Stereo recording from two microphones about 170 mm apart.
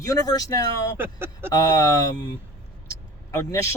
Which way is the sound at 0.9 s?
15° right (ahead or behind).